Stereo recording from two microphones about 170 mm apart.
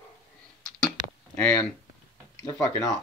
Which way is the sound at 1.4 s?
10° left (ahead or behind).